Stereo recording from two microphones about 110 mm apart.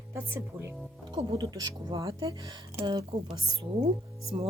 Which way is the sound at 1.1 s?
40° right (ahead or behind).